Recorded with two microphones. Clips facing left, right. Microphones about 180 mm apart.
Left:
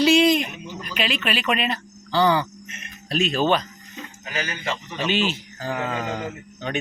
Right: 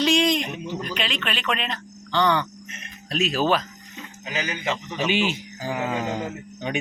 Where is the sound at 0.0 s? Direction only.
5° left (ahead or behind).